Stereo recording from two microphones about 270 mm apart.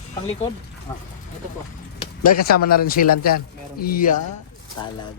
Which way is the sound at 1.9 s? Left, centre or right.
Left.